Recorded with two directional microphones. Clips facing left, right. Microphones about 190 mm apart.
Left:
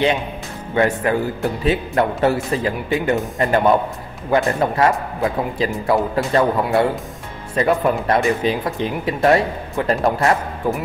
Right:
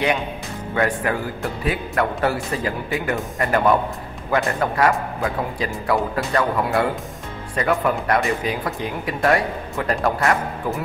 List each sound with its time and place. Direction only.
0.7 s speech: 25° left (ahead or behind)